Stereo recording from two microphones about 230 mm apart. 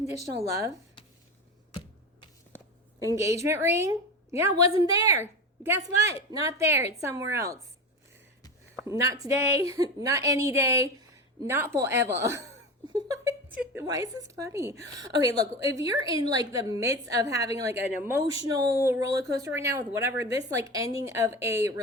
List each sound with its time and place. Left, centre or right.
3.2 s a woman's voice: centre
8.8 s a woman's voice: centre